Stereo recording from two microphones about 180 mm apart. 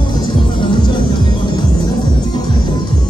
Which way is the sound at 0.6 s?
25° left (ahead or behind).